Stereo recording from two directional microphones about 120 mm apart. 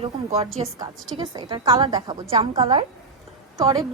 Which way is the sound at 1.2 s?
40° right (ahead or behind).